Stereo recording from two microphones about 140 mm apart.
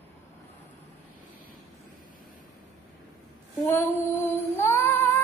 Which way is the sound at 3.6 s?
15° left (ahead or behind).